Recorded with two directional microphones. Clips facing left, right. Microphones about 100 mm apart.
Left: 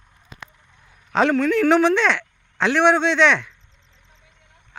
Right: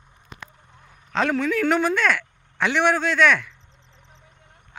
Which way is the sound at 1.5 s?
Centre (ahead or behind).